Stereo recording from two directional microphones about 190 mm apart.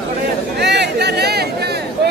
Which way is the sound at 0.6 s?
60° right (ahead or behind).